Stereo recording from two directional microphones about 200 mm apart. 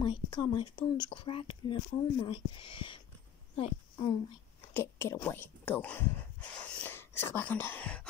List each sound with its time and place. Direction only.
0.0 s speech: 25° left (ahead or behind)
4.7 s speech: 10° left (ahead or behind)